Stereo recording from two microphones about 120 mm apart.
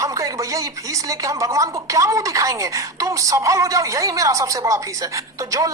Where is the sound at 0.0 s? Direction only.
25° right (ahead or behind).